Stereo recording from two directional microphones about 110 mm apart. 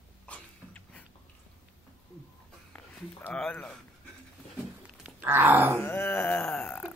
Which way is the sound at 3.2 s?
10° left (ahead or behind).